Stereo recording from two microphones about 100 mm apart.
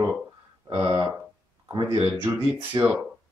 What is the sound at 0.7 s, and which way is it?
Speech, 50° right (ahead or behind).